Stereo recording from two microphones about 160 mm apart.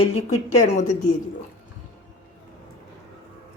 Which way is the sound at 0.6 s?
50° left (ahead or behind).